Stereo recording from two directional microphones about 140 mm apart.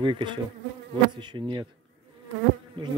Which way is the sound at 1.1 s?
35° right (ahead or behind).